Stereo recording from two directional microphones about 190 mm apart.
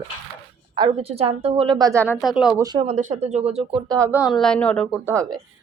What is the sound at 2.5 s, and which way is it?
Speech, 20° right (ahead or behind).